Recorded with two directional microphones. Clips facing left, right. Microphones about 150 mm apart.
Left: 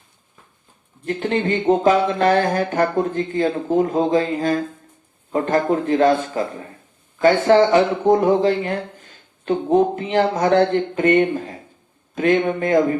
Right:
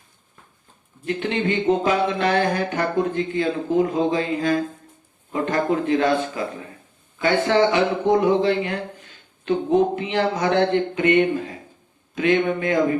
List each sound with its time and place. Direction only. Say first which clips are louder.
1.0 s speech: left 2 dB; 45° left (ahead or behind)